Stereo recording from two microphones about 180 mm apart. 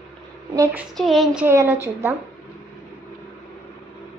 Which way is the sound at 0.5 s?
15° right (ahead or behind).